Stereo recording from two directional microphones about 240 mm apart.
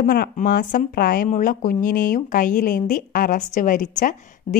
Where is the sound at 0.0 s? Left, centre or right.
Left.